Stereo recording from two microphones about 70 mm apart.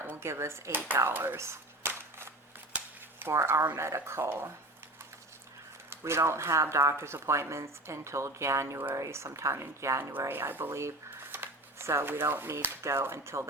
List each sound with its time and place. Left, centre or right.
0.0 s speech: right
1.4 s cap gun: right
2.7 s a sound: right
3.3 s speech: right
5.9 s speech: right
10.1 s speech: right